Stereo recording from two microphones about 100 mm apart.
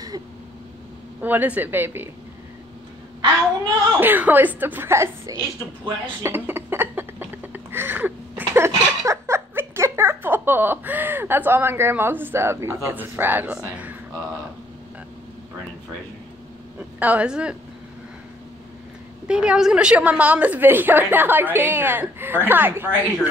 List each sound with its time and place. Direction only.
1.2 s speech: 15° right (ahead or behind)
4.0 s speech: 20° right (ahead or behind)
6.2 s a sound: 25° right (ahead or behind)
17.0 s a woman's voice: 15° right (ahead or behind)
19.2 s a woman's voice: 10° right (ahead or behind)